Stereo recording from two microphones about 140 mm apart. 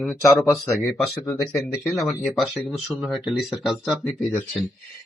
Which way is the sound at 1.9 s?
Centre (ahead or behind).